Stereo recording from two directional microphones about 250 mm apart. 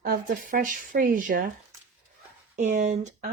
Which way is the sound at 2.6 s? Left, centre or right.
Right.